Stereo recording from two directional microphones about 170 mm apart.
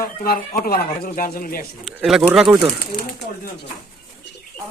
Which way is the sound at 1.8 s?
5° right (ahead or behind).